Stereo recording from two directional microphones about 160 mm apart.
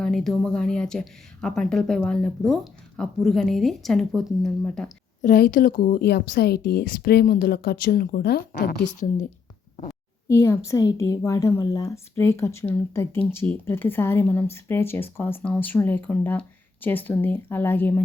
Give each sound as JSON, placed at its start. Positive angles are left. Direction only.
{"t": 0.0, "sound": "speech", "side_deg": 0}
{"t": 5.2, "sound": "speech", "side_deg": 60}
{"t": 10.2, "sound": "a woman's voice", "side_deg": 20}